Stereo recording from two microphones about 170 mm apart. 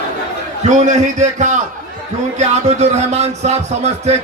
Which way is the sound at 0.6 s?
45° right (ahead or behind).